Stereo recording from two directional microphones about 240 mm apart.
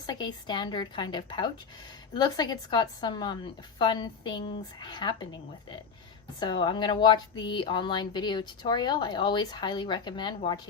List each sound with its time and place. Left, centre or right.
0.0 s a woman's voice: centre